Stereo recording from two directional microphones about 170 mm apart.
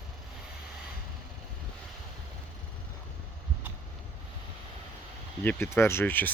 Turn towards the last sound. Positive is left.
turn(degrees=10)  # may be behind; listen again after turning